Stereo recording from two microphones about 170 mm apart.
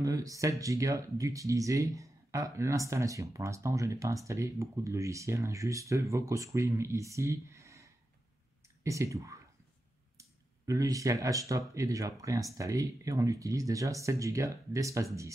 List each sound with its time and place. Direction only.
0.0 s speech: 20° right (ahead or behind)